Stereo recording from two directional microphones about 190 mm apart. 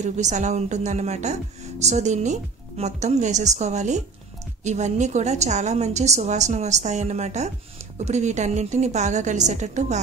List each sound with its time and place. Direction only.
0.0 s a woman's voice: 40° right (ahead or behind)